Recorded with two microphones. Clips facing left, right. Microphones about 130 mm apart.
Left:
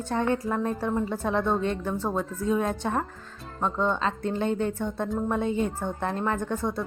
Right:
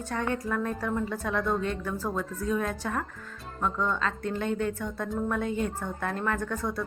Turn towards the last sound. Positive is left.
turn(degrees=25)  # may be behind; listen again after turning